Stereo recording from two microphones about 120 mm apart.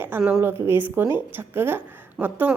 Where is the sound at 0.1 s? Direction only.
20° right (ahead or behind).